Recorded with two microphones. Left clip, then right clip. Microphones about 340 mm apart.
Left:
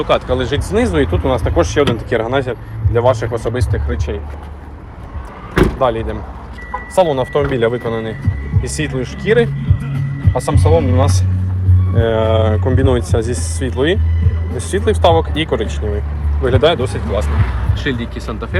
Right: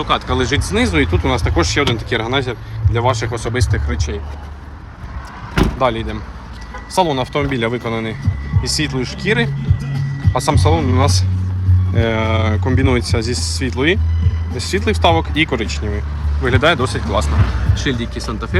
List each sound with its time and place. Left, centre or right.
0.0 s speech: centre
5.8 s speech: centre